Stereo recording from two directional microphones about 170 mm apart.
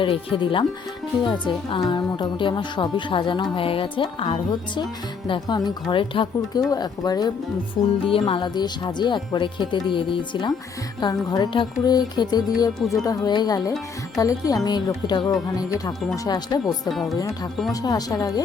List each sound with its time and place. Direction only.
0.0 s speech: 30° left (ahead or behind)
16.9 s speech: centre (ahead or behind)
17.2 s speech: 20° left (ahead or behind)